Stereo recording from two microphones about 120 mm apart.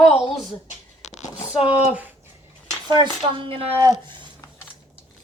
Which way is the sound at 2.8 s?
35° right (ahead or behind).